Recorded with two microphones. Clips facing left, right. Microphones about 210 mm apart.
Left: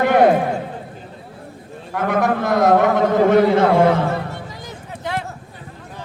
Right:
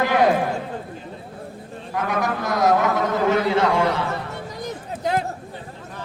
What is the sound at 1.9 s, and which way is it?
A man's voice, 55° left (ahead or behind).